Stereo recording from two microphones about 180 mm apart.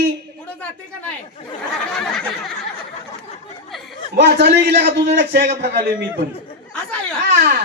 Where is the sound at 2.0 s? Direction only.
Centre (ahead or behind).